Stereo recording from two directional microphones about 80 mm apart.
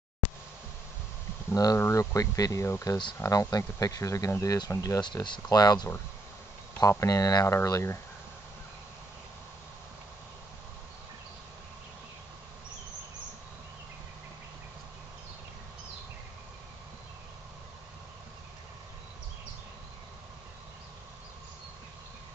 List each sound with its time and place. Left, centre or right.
0.2 s a sound: left
1.5 s speech: left
1.8 s speech: left
5.0 s speech: left
6.8 s speech: left
7.4 s speech: left